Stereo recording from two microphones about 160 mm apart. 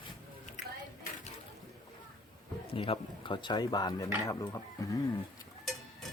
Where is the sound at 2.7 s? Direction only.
35° left (ahead or behind); by 5.0 s 20° left (ahead or behind).